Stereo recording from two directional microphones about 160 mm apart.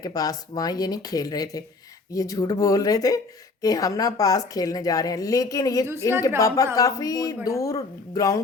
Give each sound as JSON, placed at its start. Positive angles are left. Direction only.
{"t": 0.0, "sound": "a woman's voice", "side_deg": 25}